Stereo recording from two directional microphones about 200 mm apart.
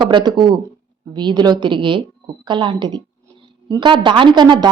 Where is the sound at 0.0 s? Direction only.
20° right (ahead or behind).